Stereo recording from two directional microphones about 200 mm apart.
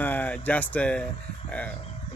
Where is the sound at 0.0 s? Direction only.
10° left (ahead or behind).